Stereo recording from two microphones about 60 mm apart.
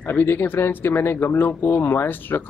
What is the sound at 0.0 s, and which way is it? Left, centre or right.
Speech, left.